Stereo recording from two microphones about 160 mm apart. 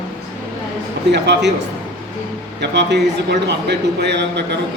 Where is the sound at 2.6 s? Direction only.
90° right.